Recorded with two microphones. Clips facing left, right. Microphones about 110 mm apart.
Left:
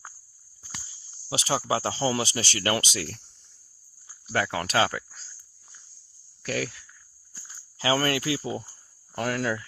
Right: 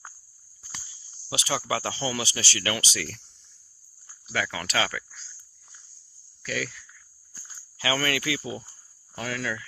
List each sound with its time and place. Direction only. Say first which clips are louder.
0.9 s speech: left 2 dB; 35° left (ahead or behind)
4.3 s speech: left 4 dB; 45° left (ahead or behind)
6.4 s speech: left 2 dB; 55° left (ahead or behind)
7.3 s walk: even; centre (ahead or behind)
7.8 s speech: left 3 dB; 35° left (ahead or behind)
8.5 s cricket: left 4 dB; 50° left (ahead or behind)